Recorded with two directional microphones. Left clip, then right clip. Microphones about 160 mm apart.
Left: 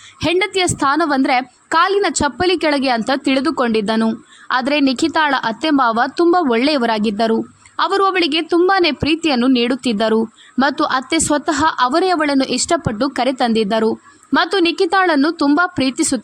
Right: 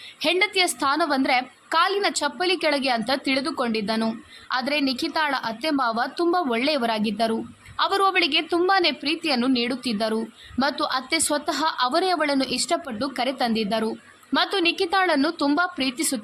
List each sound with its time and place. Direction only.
0.2 s a woman's voice: 40° left (ahead or behind)